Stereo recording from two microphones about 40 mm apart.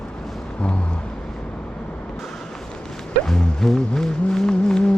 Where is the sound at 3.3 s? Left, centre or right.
Centre.